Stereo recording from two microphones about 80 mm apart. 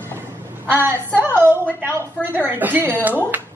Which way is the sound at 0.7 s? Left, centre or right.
Right.